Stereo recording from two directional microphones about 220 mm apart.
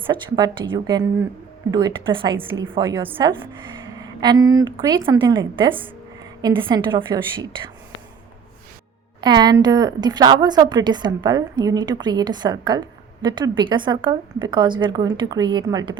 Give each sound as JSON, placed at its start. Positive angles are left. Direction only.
{"t": 0.1, "sound": "a woman's voice", "side_deg": -15}
{"t": 9.2, "sound": "a woman's voice", "side_deg": -20}